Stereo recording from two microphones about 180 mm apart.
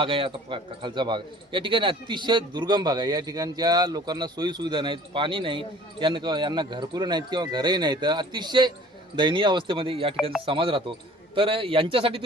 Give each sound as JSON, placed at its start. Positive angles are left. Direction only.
{"t": 0.0, "sound": "speech", "side_deg": -30}